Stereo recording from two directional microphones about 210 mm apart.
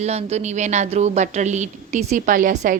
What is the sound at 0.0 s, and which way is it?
A woman's voice, 30° right (ahead or behind).